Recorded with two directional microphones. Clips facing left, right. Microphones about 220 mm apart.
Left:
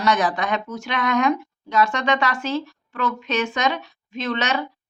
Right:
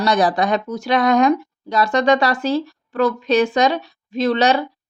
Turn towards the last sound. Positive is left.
turn(degrees=-35)  # may be behind; listen again after turning